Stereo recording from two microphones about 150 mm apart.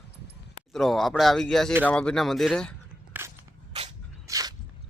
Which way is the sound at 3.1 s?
10° right (ahead or behind).